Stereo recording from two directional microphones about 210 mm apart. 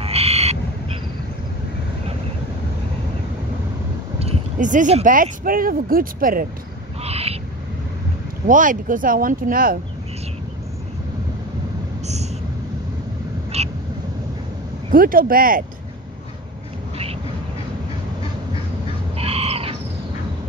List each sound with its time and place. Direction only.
0.0 s owl: 30° right (ahead or behind)
4.2 s speech: 35° right (ahead or behind)
7.0 s owl: 30° right (ahead or behind)
8.5 s speech: 40° right (ahead or behind)
13.5 s vehicle: 30° right (ahead or behind)
14.9 s speech: 40° right (ahead or behind)
19.1 s bird: 30° right (ahead or behind)